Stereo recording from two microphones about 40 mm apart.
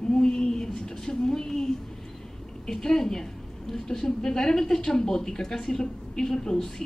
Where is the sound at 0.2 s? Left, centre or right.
Centre.